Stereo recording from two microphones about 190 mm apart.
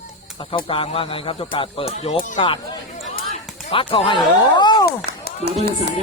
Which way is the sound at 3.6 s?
30° left (ahead or behind).